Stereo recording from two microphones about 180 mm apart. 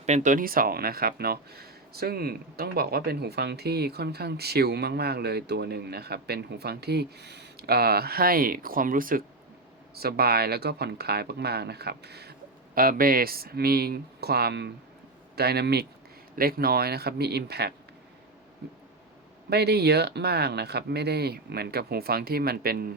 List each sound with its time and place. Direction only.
0.0 s speech: 40° right (ahead or behind); by 17.7 s 65° right (ahead or behind)
19.5 s speech: 65° right (ahead or behind)